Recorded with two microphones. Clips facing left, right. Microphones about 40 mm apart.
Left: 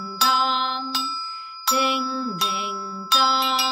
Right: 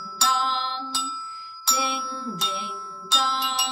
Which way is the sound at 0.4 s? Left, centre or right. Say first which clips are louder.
Left 3 dB; left.